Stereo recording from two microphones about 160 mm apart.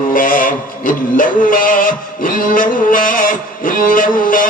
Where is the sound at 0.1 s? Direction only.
60° left (ahead or behind).